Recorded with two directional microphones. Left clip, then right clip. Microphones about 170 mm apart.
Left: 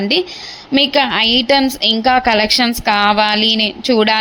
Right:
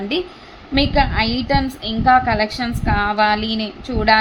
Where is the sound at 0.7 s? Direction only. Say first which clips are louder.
Left 4 dB; 30° left (ahead or behind).